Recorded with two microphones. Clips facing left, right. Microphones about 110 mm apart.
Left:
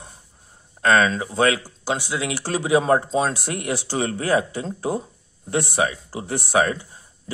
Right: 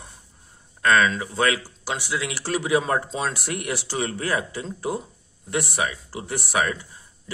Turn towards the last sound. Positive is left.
turn(degrees=30)  # may be behind; listen again after turning